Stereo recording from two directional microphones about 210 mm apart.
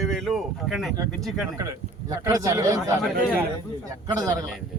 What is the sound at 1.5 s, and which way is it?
A man's voice, 15° right (ahead or behind).